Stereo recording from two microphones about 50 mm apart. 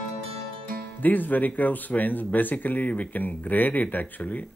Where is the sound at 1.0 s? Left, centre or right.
Left.